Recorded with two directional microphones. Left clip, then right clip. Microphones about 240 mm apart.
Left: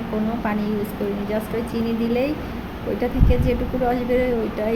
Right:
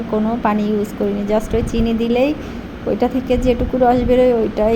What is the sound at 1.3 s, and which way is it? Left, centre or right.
Speech, right.